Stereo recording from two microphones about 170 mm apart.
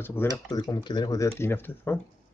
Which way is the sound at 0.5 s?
25° left (ahead or behind).